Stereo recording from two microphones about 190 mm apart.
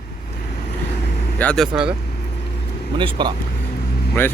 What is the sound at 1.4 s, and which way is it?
Speech, 5° left (ahead or behind).